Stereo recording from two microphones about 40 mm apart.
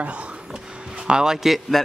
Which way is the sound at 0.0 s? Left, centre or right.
Right.